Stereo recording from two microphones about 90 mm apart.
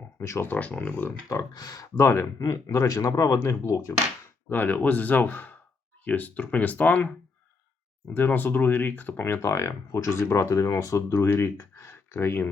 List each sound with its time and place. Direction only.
0.2 s speech: 35° left (ahead or behind)
0.5 s speech: 15° left (ahead or behind)
1.3 s speech: 40° left (ahead or behind)
4.4 s speech: 20° left (ahead or behind)
8.1 s speech: 20° left (ahead or behind)